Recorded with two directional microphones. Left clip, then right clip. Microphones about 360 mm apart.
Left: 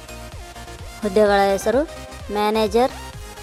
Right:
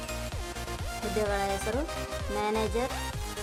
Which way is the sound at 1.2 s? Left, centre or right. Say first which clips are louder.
Left 15 dB; centre.